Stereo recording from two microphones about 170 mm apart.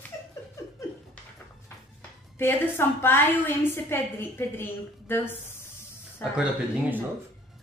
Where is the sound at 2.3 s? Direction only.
15° left (ahead or behind).